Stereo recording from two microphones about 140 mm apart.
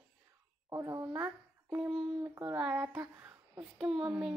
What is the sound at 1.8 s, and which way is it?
Speech, centre (ahead or behind).